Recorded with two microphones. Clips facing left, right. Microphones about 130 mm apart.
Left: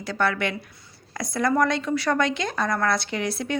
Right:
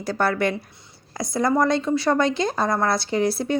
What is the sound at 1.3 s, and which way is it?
Speech, 25° right (ahead or behind).